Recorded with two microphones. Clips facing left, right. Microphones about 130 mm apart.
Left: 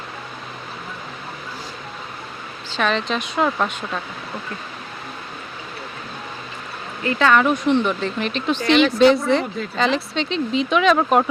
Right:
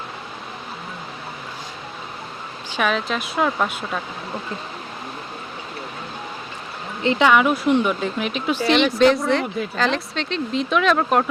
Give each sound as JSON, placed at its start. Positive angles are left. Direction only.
{"t": 2.7, "sound": "speech", "side_deg": -5}
{"t": 7.0, "sound": "speech", "side_deg": -25}
{"t": 7.3, "sound": "speech", "side_deg": -5}